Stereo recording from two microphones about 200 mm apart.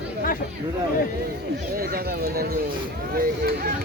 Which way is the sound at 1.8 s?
50° right (ahead or behind).